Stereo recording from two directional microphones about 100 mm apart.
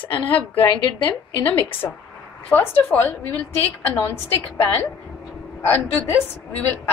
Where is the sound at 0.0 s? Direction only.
20° left (ahead or behind).